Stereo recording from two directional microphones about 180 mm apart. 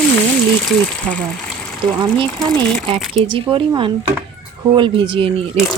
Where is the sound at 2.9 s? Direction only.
30° right (ahead or behind).